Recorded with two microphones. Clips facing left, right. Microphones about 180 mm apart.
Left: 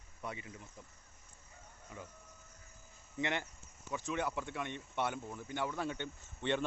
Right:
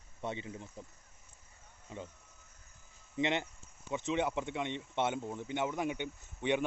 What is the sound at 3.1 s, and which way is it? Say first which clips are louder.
Speech: right 5 dB; 20° right (ahead or behind).